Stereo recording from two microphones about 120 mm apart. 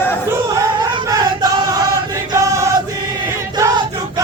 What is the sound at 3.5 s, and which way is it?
Choir, 30° right (ahead or behind).